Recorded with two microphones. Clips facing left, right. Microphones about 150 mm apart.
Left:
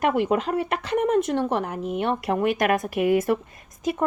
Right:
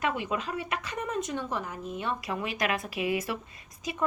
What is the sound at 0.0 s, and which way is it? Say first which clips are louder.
Speech: left 9 dB; 60° left (ahead or behind).